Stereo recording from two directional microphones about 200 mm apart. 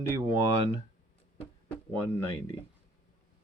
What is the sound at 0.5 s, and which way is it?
Speech, 35° right (ahead or behind).